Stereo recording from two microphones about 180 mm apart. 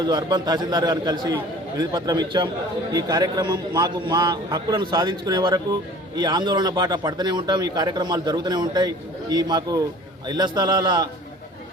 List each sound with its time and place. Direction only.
0.0 s speech: 20° right (ahead or behind)